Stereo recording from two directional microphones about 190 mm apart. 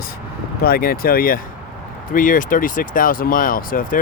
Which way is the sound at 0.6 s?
50° left (ahead or behind).